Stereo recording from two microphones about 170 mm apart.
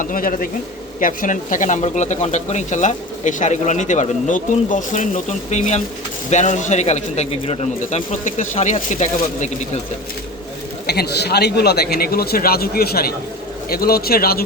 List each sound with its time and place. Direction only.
0.0 s speech: 50° left (ahead or behind)
10.8 s speech: 70° left (ahead or behind)